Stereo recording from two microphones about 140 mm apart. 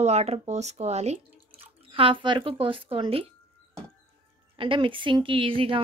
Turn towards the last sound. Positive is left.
turn(degrees=-40)  # may be behind; listen again after turning